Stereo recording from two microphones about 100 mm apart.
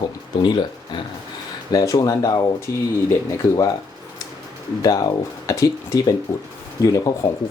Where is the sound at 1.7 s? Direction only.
35° left (ahead or behind).